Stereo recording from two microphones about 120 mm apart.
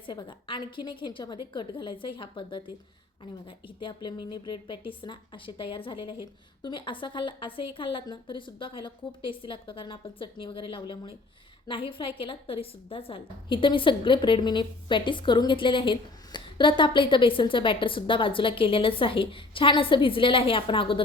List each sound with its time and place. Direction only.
0.1 s a woman's voice: 40° left (ahead or behind)